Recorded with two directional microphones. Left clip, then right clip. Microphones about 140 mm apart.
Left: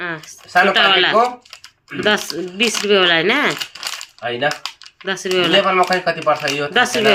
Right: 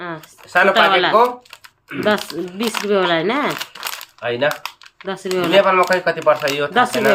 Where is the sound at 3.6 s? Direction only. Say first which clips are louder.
Left 1 dB; 40° right (ahead or behind).